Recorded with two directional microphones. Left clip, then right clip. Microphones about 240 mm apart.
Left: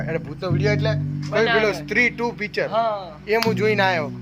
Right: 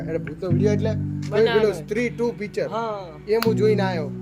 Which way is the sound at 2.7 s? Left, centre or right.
Right.